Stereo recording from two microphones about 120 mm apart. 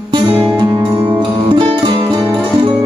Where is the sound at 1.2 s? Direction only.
45° right (ahead or behind).